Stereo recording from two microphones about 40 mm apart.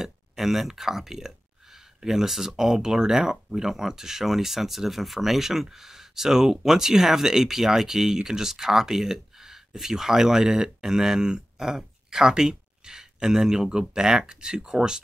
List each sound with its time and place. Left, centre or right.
0.0 s speech: centre